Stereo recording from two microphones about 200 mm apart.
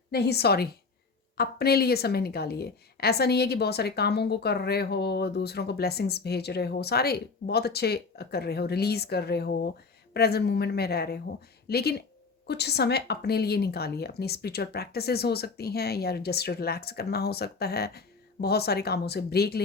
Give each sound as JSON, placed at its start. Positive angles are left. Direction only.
{"t": 0.1, "sound": "a woman's voice", "side_deg": 55}